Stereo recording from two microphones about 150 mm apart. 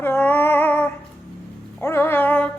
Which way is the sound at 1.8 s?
15° left (ahead or behind).